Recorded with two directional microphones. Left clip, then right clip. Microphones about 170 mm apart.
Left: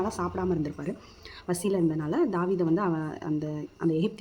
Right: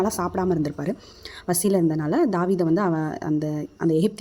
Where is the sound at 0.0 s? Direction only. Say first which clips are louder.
Right 6 dB; 45° right (ahead or behind).